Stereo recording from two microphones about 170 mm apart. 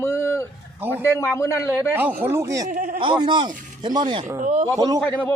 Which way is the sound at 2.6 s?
50° right (ahead or behind).